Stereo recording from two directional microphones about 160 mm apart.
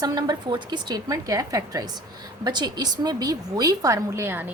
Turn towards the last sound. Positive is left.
turn(degrees=-15)  # may be behind; listen again after turning